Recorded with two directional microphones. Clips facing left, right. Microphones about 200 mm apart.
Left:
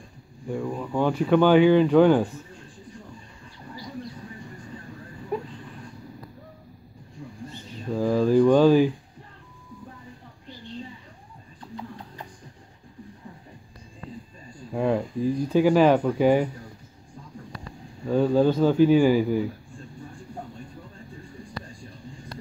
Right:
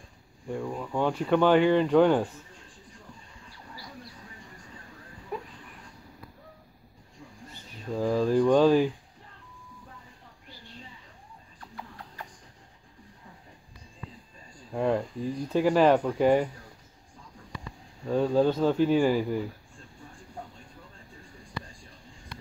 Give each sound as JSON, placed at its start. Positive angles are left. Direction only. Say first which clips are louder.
{"t": 0.5, "sound": "speech", "louder": "left 4 dB", "side_deg": 0}
{"t": 3.7, "sound": "a sound", "louder": "left 10 dB", "side_deg": 20}
{"t": 7.9, "sound": "speech", "louder": "left 4 dB", "side_deg": 0}
{"t": 14.7, "sound": "speech", "louder": "left 2 dB", "side_deg": 5}
{"t": 18.0, "sound": "speech", "louder": "left 3 dB", "side_deg": 0}